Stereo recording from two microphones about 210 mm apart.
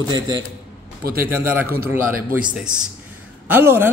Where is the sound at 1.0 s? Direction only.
45° right (ahead or behind).